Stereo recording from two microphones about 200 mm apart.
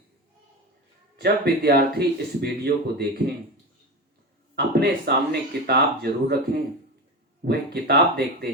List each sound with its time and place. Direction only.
1.1 s speech: 50° right (ahead or behind)
4.5 s speech: 55° right (ahead or behind)
7.4 s speech: 55° right (ahead or behind)